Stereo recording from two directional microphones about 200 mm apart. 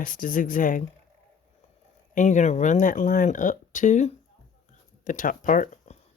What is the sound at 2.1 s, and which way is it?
Speech, 40° left (ahead or behind).